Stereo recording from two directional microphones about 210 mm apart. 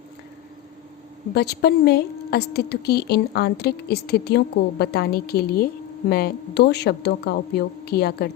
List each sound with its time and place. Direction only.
1.3 s a woman's voice: 50° left (ahead or behind)